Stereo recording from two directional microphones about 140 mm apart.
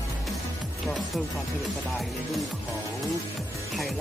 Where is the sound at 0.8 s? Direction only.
Centre (ahead or behind).